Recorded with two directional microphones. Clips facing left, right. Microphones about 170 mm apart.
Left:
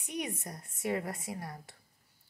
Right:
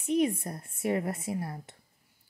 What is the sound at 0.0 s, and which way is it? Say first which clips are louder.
A woman's voice: right 11 dB; 30° right (ahead or behind).